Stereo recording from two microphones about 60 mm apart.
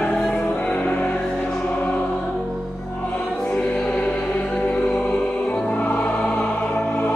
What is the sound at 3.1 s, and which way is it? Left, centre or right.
Music, left.